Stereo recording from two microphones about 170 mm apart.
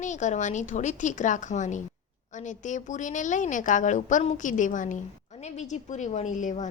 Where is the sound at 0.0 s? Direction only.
45° left (ahead or behind).